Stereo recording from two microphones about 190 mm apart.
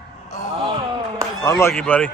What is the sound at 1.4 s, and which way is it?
Speech, 20° left (ahead or behind).